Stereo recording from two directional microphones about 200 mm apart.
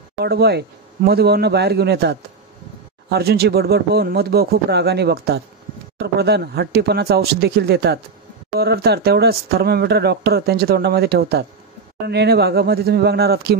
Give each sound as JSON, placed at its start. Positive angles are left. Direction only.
{"t": 0.2, "sound": "speech", "side_deg": -55}